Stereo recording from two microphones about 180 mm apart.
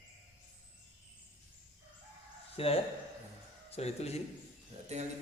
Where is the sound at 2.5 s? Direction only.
35° left (ahead or behind).